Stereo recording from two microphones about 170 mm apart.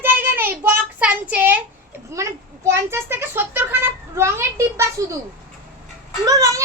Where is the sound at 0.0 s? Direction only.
10° right (ahead or behind).